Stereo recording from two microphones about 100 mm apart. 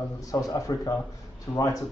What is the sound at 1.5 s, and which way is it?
Speech, 45° left (ahead or behind).